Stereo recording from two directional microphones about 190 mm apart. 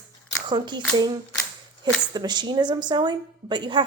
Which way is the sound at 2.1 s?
20° right (ahead or behind).